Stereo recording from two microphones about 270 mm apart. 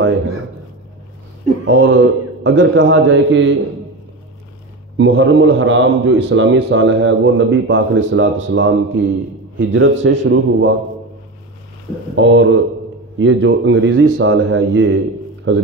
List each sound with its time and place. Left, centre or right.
1.7 s a man's voice: right
4.9 s a man's voice: right
12.2 s a man's voice: right